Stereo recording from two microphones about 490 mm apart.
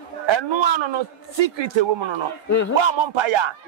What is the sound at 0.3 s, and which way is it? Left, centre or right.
A man's voice, right.